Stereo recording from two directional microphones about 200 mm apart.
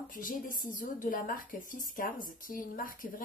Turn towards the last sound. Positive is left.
turn(degrees=45)  # may be behind; listen again after turning